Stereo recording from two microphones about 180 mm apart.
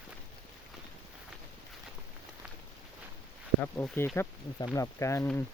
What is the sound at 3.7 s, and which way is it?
Speech, 10° left (ahead or behind).